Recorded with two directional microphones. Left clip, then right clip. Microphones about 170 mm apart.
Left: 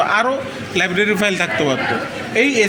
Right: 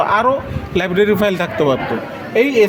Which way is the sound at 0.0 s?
75° right (ahead or behind).